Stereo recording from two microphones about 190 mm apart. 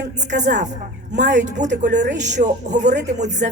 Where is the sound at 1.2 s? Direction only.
65° right (ahead or behind).